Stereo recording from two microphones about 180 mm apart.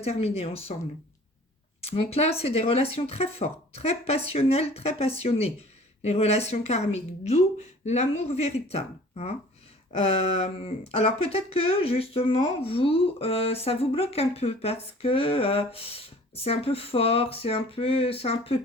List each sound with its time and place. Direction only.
0.0 s speech: 35° left (ahead or behind)
1.8 s speech: 35° left (ahead or behind)